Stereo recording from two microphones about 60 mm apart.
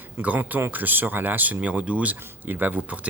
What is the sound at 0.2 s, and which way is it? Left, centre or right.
Speech, right.